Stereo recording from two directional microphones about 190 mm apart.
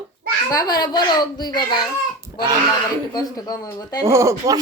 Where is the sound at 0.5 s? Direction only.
20° left (ahead or behind).